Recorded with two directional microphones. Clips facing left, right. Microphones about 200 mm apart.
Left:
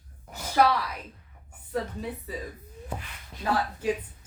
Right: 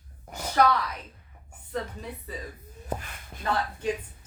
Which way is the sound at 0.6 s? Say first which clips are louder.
Even; 10° left (ahead or behind).